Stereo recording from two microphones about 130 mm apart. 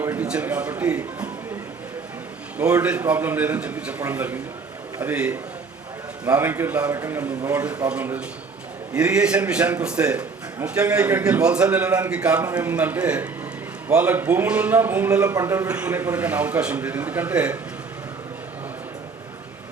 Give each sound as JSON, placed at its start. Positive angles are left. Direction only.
{"t": 0.0, "sound": "a man's voice", "side_deg": -15}
{"t": 2.6, "sound": "a man's voice", "side_deg": -10}